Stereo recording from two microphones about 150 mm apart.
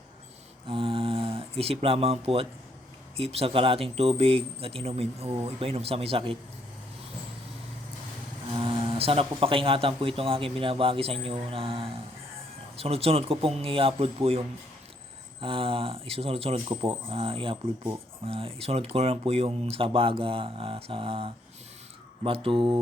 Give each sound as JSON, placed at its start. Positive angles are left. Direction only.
{"t": 0.7, "sound": "speech", "side_deg": -35}
{"t": 8.5, "sound": "speech", "side_deg": -35}